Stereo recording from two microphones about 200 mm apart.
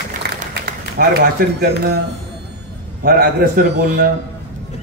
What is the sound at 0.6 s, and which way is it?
Speech, 50° right (ahead or behind).